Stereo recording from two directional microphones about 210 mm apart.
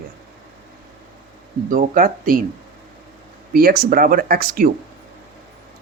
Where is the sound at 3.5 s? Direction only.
45° right (ahead or behind).